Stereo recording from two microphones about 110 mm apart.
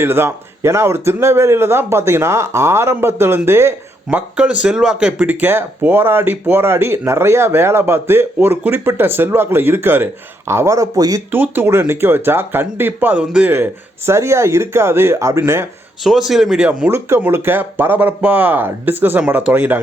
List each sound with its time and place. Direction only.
0.0 s speech: 20° right (ahead or behind)
4.4 s speech: 10° right (ahead or behind); by 11.2 s 30° right (ahead or behind)
11.3 s speech: 20° right (ahead or behind)
16.0 s speech: centre (ahead or behind)
16.9 s speech: 20° right (ahead or behind)